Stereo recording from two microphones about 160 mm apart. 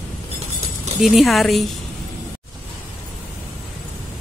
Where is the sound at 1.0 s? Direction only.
Centre (ahead or behind).